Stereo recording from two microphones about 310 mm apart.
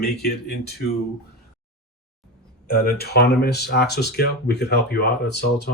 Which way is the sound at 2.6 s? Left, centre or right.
Left.